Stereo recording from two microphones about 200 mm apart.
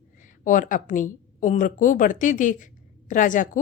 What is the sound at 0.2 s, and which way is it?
A woman's voice, 40° left (ahead or behind).